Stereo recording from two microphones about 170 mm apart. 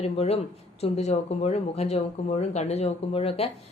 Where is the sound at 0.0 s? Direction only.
40° left (ahead or behind).